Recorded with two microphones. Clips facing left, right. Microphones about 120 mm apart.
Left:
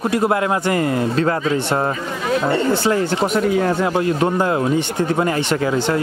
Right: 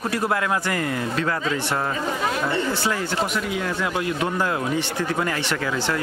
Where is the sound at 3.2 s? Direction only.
40° left (ahead or behind).